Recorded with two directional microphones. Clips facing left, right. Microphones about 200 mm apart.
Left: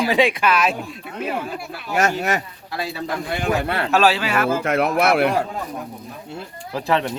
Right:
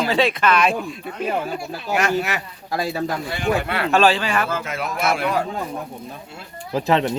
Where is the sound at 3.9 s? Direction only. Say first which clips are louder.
Right 1 dB; 5° left (ahead or behind).